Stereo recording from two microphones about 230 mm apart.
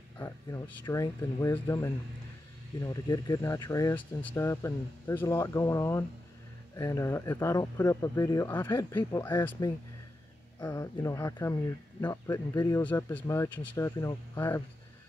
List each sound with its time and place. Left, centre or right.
0.2 s speech: centre